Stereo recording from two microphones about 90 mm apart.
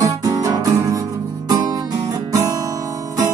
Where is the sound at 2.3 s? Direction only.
40° right (ahead or behind).